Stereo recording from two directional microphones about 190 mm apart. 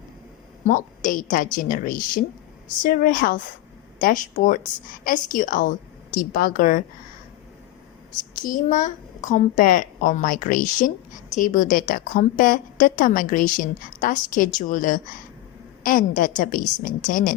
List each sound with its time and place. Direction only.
0.6 s a woman's voice: 40° left (ahead or behind)
8.4 s a woman's voice: 45° left (ahead or behind)